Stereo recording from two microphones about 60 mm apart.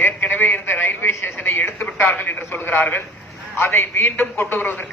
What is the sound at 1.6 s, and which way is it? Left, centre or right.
A man's voice, left.